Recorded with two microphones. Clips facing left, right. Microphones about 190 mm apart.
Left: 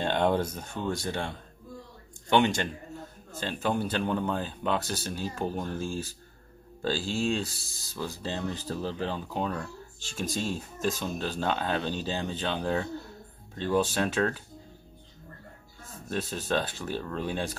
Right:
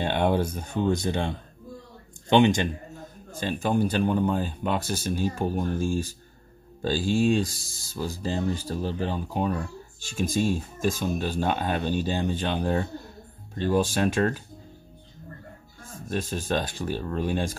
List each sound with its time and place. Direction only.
0.0 s speech: 10° right (ahead or behind)
0.8 s speech: 20° right (ahead or behind)
16.1 s speech: 10° right (ahead or behind)